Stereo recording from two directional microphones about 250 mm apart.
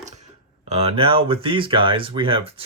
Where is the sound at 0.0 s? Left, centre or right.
Right.